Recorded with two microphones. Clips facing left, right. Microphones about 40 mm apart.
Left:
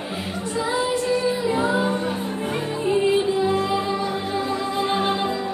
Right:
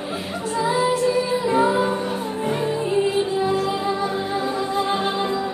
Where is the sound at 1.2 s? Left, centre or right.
Right.